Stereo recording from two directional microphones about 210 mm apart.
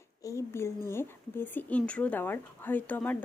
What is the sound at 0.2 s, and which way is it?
Speech, 15° left (ahead or behind).